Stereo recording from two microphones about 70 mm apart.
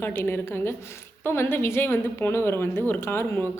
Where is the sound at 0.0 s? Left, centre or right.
Left.